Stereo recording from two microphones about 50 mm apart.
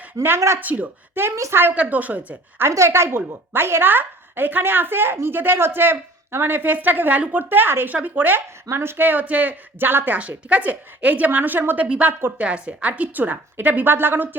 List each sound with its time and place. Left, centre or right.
0.3 s speech: right
0.6 s a woman's voice: right
2.6 s a woman's voice: right
6.6 s a woman's voice: right
7.9 s a woman's voice: right
8.7 s a woman's voice: right
9.9 s speech: right
10.2 s a woman's voice: right
12.9 s a woman's voice: right
13.9 s speech: right